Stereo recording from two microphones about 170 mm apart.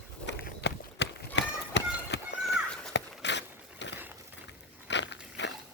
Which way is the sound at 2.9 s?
90° left.